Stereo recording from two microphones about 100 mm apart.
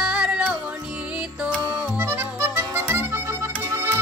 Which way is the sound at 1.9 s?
20° right (ahead or behind).